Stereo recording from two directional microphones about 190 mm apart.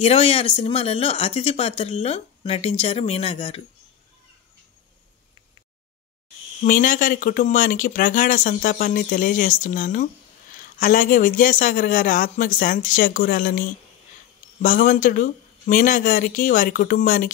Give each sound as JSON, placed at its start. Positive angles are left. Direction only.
{"t": 0.0, "sound": "speech", "side_deg": 30}
{"t": 6.6, "sound": "speech", "side_deg": 45}